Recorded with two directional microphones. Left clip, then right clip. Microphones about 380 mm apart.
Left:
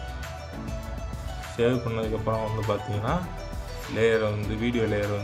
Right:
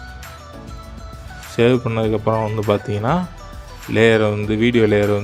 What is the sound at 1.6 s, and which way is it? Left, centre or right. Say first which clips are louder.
Speech: right 9 dB; right.